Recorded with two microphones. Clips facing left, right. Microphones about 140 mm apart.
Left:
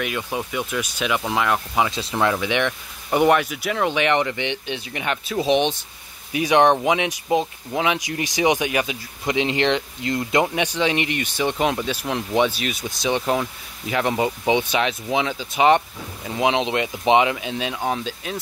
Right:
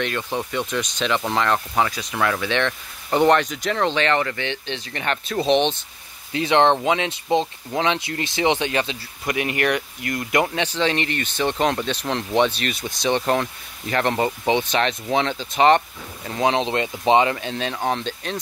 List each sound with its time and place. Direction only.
0.0 s speech: 10° left (ahead or behind)
1.9 s speech: 25° left (ahead or behind)
2.3 s speech: 15° left (ahead or behind)